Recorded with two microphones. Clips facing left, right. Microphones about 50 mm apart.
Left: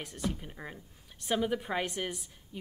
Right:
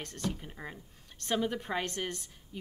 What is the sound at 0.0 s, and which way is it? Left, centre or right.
A woman's voice, centre.